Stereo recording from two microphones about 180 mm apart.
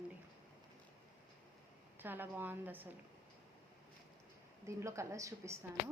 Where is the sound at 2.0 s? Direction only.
10° right (ahead or behind).